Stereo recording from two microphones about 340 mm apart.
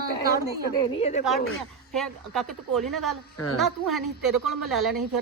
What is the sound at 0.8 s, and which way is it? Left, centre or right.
Speech, centre.